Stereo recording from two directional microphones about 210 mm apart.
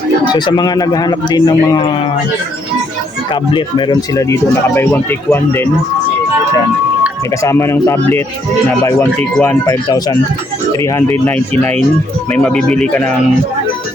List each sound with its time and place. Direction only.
0.3 s a man's voice: 20° left (ahead or behind)
3.5 s speech: 20° left (ahead or behind)
7.4 s speech: 15° left (ahead or behind)